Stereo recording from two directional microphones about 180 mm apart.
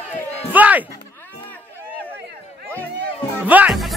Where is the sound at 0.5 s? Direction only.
10° right (ahead or behind).